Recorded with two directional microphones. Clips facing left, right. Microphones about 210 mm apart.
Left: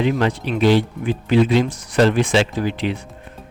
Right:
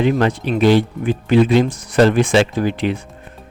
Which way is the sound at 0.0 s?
50° right (ahead or behind).